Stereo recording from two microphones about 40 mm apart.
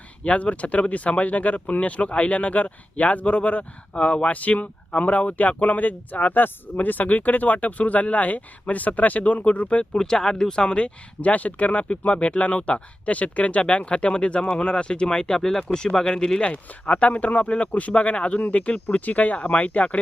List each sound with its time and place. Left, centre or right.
0.3 s speech: left
9.9 s speech: centre
16.5 s speech: left